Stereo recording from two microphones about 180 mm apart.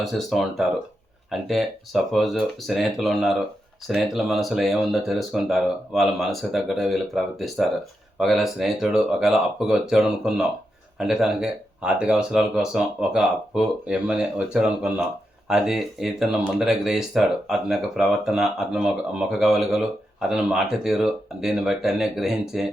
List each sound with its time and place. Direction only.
0.0 s speech: centre (ahead or behind)